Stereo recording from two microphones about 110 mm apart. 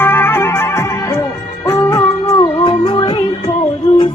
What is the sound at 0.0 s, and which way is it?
Music, 20° left (ahead or behind).